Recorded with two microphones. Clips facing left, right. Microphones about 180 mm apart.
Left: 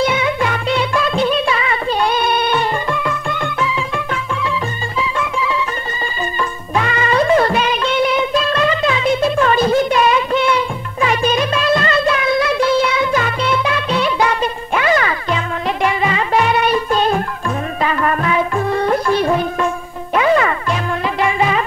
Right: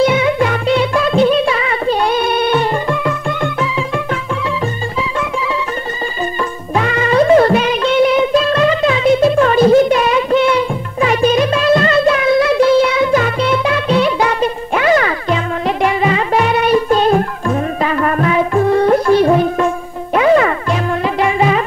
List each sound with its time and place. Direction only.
0.0 s music: 40° right (ahead or behind)
6.7 s music: 40° right (ahead or behind)